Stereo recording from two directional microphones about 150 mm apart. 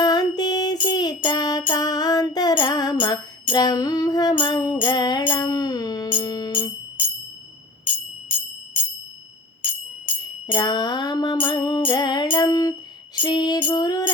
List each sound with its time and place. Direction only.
0.0 s music: 25° left (ahead or behind)
10.4 s music: 25° left (ahead or behind)